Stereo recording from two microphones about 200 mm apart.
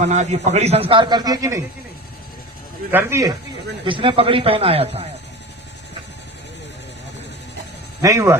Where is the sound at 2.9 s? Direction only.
15° right (ahead or behind).